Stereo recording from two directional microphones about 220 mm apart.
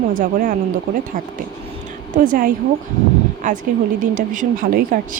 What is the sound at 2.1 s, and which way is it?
A woman's voice, 40° right (ahead or behind).